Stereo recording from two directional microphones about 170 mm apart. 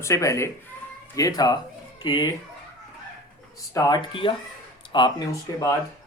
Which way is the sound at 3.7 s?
25° left (ahead or behind).